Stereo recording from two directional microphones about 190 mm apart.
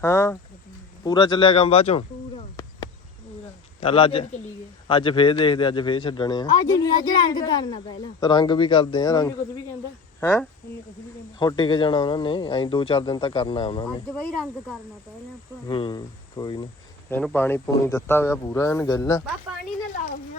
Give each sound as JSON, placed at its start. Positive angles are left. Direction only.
{"t": 0.0, "sound": "speech", "side_deg": 15}
{"t": 1.0, "sound": "a sound", "side_deg": 25}
{"t": 3.8, "sound": "a man's voice", "side_deg": 30}
{"t": 10.2, "sound": "speech", "side_deg": 10}
{"t": 11.3, "sound": "a man's voice", "side_deg": 25}
{"t": 15.6, "sound": "a man's voice", "side_deg": 25}
{"t": 17.1, "sound": "speech", "side_deg": 10}